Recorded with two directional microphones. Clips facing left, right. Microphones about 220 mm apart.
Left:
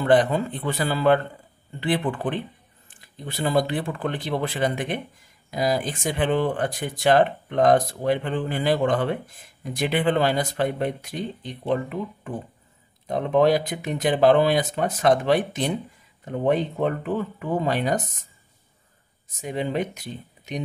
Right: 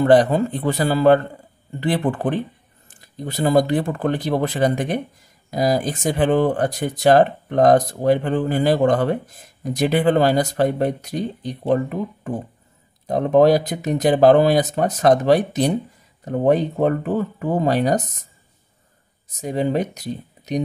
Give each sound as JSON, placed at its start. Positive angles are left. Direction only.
{"t": 0.0, "sound": "speech", "side_deg": -40}
{"t": 19.4, "sound": "speech", "side_deg": -40}